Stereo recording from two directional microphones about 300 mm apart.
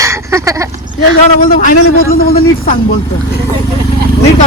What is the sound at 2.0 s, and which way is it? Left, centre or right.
Speech, left.